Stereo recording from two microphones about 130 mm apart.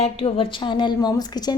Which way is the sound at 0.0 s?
50° left (ahead or behind).